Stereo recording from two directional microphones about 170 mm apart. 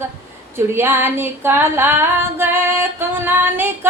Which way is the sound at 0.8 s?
15° right (ahead or behind).